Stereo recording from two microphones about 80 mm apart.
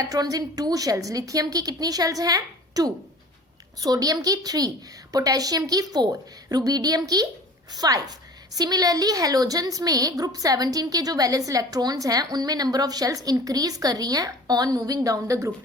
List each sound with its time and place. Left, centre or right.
0.0 s a woman's voice: right